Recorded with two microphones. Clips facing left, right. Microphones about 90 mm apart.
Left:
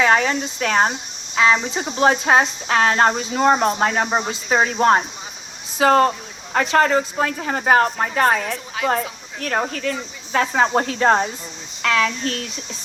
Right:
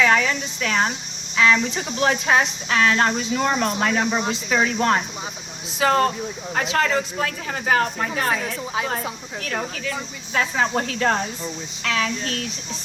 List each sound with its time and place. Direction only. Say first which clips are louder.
0.0 s speech: left 2 dB; 35° left (ahead or behind)
1.4 s speech: left 1 dB; 25° left (ahead or behind)
6.5 s speech: left 5 dB; 50° left (ahead or behind)
8.8 s speech: left 4 dB; 20° right (ahead or behind)
9.4 s speech: left 6 dB; 45° left (ahead or behind)
11.8 s speech: left 5 dB; 45° left (ahead or behind)